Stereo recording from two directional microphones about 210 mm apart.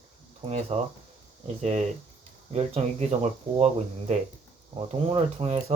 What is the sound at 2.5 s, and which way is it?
Speech, 30° right (ahead or behind).